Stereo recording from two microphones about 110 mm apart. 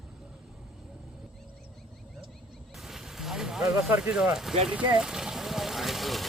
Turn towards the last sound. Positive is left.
turn(degrees=0)  # may be behind; listen again after turning